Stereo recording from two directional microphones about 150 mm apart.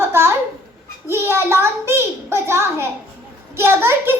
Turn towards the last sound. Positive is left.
turn(degrees=-15)  # may be behind; listen again after turning